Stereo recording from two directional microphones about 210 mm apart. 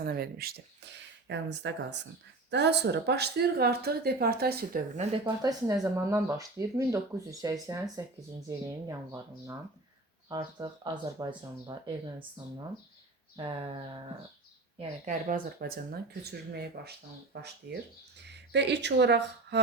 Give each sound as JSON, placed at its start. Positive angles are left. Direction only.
{"t": 0.0, "sound": "speech", "side_deg": -45}
{"t": 4.9, "sound": "speech", "side_deg": -20}
{"t": 13.3, "sound": "speech", "side_deg": -25}
{"t": 15.4, "sound": "speech", "side_deg": -45}